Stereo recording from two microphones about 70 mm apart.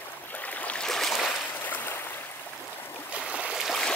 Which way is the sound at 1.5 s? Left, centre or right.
Left.